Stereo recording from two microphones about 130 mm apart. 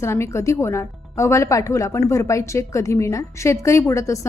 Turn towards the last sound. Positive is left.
turn(degrees=20)  # may be behind; listen again after turning